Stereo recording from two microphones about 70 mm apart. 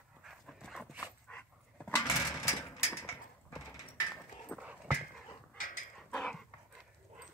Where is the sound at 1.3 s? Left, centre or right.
Left.